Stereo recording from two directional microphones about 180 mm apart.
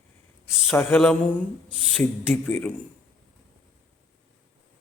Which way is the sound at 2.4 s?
10° left (ahead or behind).